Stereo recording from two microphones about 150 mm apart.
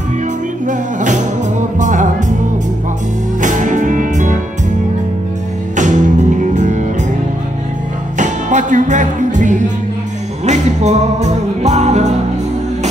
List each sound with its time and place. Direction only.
0.7 s music: 55° right (ahead or behind)
3.3 s music: 55° right (ahead or behind)
5.8 s music: 55° right (ahead or behind)
8.2 s music: 55° right (ahead or behind)